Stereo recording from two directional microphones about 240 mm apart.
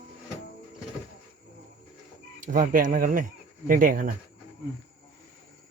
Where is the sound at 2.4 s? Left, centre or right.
Right.